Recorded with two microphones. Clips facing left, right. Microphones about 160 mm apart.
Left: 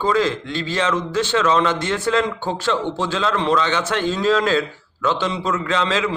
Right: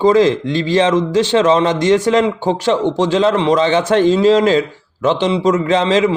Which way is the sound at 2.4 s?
90° right.